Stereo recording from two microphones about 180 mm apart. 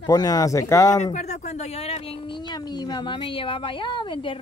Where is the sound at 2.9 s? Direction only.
25° left (ahead or behind).